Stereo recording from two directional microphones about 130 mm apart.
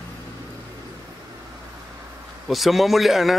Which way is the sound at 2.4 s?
Centre (ahead or behind).